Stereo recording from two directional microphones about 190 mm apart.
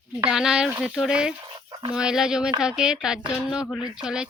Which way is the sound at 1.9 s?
5° right (ahead or behind).